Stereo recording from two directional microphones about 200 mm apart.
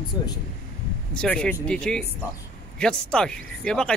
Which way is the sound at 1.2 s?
5° left (ahead or behind).